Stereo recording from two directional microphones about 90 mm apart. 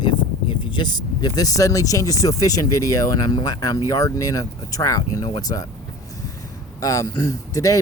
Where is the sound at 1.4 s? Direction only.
40° left (ahead or behind).